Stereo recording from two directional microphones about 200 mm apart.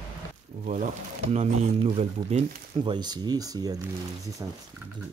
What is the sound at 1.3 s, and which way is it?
Speech, 30° right (ahead or behind).